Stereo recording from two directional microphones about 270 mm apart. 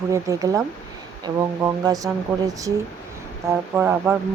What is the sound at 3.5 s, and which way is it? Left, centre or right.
Speech, centre.